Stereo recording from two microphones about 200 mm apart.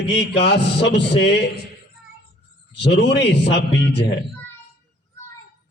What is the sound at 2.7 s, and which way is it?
A man's voice, 60° left (ahead or behind).